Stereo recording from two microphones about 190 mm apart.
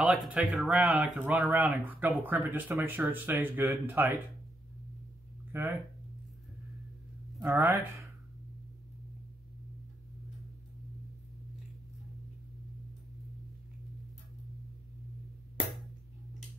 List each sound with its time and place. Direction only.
0.0 s speech: 5° right (ahead or behind)
5.5 s speech: 10° right (ahead or behind)
7.5 s speech: 15° right (ahead or behind)